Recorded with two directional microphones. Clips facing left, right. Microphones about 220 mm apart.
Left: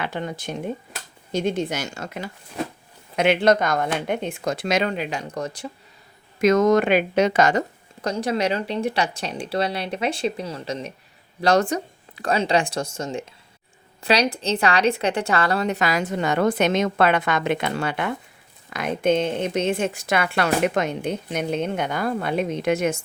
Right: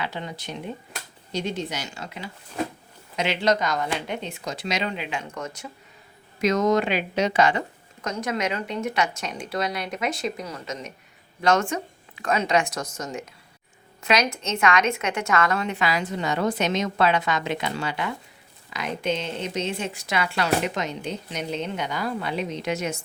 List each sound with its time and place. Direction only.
0.0 s a woman's voice: 50° left (ahead or behind); by 5.6 s 35° left (ahead or behind)
6.4 s a woman's voice: 50° left (ahead or behind)
8.0 s a woman's voice: 30° left (ahead or behind); by 23.0 s 55° left (ahead or behind)